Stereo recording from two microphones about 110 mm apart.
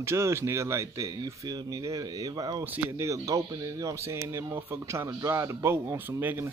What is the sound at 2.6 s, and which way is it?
Speech, 20° right (ahead or behind).